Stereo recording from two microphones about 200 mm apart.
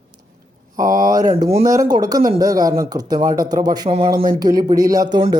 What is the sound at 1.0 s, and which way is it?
Speech, 20° right (ahead or behind).